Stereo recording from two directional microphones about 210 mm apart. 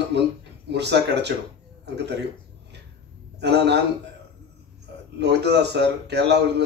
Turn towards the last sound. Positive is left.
turn(degrees=-55)  # may be behind; listen again after turning